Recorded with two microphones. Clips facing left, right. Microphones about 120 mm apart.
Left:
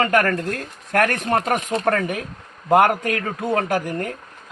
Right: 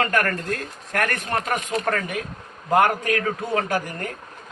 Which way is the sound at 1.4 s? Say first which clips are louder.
Left 3 dB; 45° left (ahead or behind).